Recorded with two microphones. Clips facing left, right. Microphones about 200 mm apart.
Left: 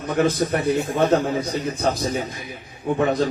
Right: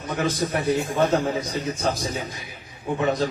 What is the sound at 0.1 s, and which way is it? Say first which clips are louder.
A man's voice: left 5 dB; 55° left (ahead or behind).